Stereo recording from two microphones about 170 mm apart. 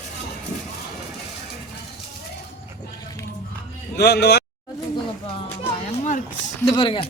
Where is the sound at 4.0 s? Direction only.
70° left (ahead or behind).